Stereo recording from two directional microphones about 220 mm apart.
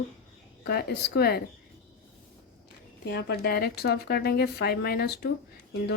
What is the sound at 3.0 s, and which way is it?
A woman's voice, 45° left (ahead or behind).